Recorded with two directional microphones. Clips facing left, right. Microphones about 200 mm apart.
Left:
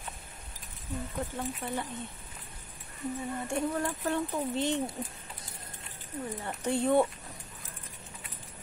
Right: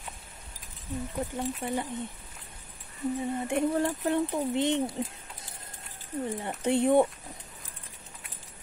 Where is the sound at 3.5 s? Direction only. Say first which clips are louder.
Right 4 dB; 25° right (ahead or behind).